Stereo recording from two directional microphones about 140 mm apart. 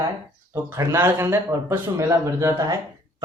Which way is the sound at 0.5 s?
20° right (ahead or behind).